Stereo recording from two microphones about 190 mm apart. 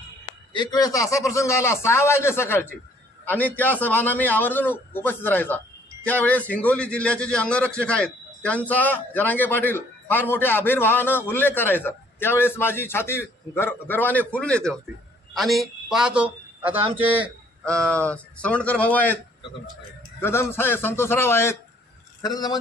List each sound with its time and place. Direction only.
0.5 s a man's voice: 20° left (ahead or behind); by 16.9 s 10° right (ahead or behind)
17.6 s a man's voice: 5° left (ahead or behind)
20.2 s a man's voice: 10° left (ahead or behind)